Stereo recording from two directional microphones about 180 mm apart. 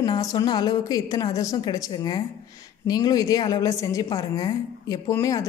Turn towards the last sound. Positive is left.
turn(degrees=15)  # may be behind; listen again after turning